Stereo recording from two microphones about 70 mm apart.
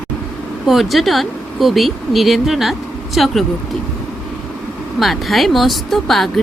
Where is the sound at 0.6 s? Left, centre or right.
Centre.